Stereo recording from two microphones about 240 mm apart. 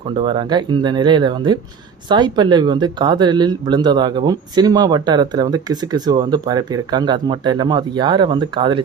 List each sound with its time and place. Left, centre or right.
0.2 s speech: centre